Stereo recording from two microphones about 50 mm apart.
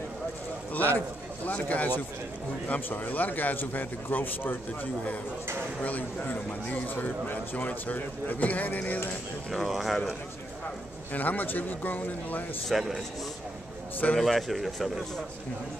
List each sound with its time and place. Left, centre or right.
0.7 s speech: left
5.8 s speech: left
9.5 s speech: centre
11.1 s speech: left
12.6 s speech: centre
14.1 s speech: centre